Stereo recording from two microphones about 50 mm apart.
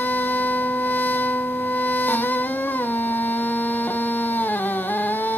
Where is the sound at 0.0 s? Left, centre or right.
Left.